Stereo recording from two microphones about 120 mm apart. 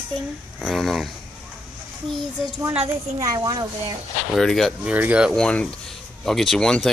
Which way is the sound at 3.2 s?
30° right (ahead or behind).